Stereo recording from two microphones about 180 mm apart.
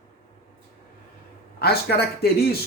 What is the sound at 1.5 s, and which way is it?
A man's voice, 60° left (ahead or behind).